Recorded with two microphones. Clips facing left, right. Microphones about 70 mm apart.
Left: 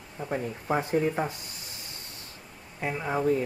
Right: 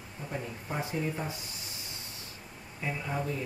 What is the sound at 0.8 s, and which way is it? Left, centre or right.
Speech, left.